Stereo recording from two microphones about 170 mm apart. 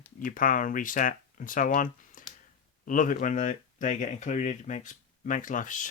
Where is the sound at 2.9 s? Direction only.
50° left (ahead or behind).